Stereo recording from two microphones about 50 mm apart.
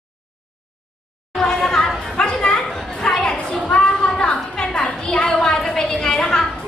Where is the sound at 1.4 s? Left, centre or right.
Centre.